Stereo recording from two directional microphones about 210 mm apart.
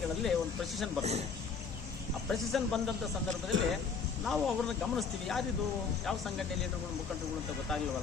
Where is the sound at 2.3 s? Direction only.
Centre (ahead or behind).